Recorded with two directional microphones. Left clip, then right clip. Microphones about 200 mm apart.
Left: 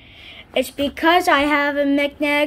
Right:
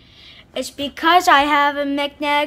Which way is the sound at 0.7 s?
10° right (ahead or behind).